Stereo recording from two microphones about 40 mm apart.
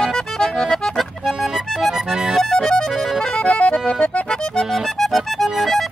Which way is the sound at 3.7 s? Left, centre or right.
Centre.